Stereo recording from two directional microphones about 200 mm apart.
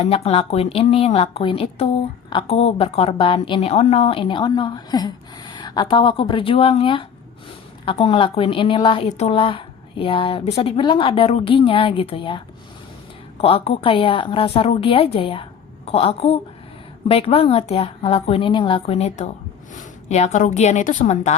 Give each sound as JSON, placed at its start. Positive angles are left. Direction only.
{"t": 0.0, "sound": "a woman's voice", "side_deg": 30}
{"t": 13.4, "sound": "a woman's voice", "side_deg": 30}